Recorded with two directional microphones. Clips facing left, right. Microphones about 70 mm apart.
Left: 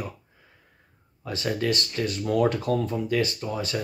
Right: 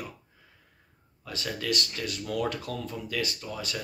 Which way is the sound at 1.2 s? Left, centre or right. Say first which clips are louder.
Left 7 dB; left.